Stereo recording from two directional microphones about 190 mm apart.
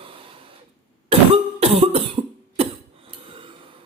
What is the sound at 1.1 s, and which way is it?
Cough, 30° right (ahead or behind).